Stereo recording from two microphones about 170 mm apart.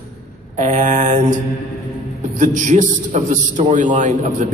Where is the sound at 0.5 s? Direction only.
50° right (ahead or behind).